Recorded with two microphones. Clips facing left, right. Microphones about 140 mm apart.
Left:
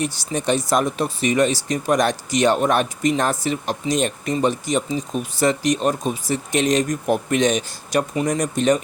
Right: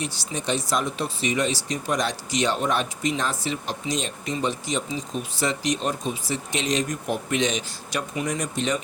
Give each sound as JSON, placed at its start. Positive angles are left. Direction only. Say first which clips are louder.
{"t": 0.0, "sound": "speech", "louder": "left 6 dB", "side_deg": 50}